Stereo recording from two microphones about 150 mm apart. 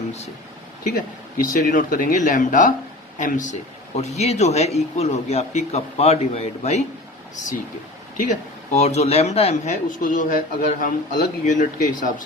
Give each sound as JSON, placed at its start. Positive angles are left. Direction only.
{"t": 1.4, "sound": "speech", "side_deg": 60}
{"t": 8.2, "sound": "speech", "side_deg": 50}
{"t": 9.9, "sound": "speech", "side_deg": 60}